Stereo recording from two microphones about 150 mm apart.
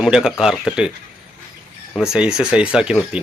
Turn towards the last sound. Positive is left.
turn(degrees=-5)  # may be behind; listen again after turning